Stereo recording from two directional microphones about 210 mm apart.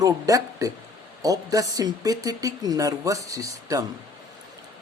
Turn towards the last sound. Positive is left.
turn(degrees=-15)  # may be behind; listen again after turning